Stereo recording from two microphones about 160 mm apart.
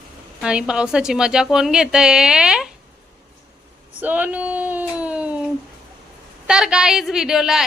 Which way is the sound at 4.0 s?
10° right (ahead or behind).